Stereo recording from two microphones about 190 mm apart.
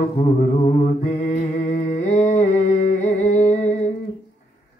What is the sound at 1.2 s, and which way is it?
Humming, 35° left (ahead or behind).